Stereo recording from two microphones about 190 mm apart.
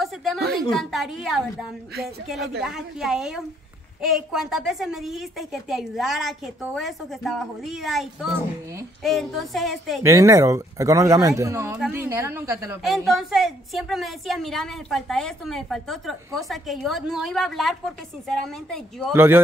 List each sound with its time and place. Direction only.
0.0 s a sound: centre (ahead or behind)
0.4 s speech: 55° right (ahead or behind)
0.7 s a woman's voice: centre (ahead or behind)
10.0 s speech: 15° right (ahead or behind)
12.8 s a woman's voice: centre (ahead or behind)
19.1 s speech: 10° right (ahead or behind)